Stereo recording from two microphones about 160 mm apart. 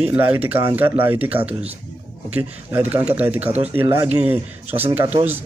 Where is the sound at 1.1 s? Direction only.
40° right (ahead or behind).